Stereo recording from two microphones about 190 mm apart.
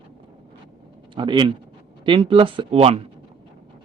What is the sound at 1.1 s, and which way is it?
Speech, 25° right (ahead or behind).